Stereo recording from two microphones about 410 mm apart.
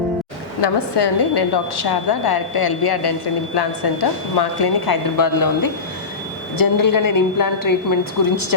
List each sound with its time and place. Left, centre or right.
0.6 s a woman's voice: left